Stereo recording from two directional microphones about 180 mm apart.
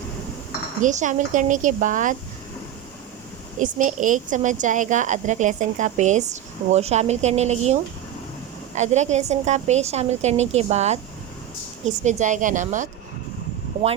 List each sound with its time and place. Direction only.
0.8 s a woman's voice: 45° right (ahead or behind)
3.6 s a woman's voice: 45° right (ahead or behind)
12.0 s a woman's voice: 40° right (ahead or behind)